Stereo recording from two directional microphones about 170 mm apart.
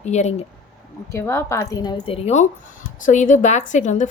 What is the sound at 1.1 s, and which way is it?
A woman's voice, 15° left (ahead or behind).